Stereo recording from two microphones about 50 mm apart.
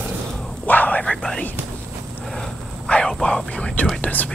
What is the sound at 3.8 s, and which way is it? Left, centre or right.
Whispering, left.